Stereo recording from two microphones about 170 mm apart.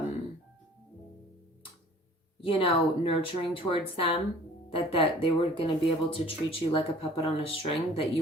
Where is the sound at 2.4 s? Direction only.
30° left (ahead or behind).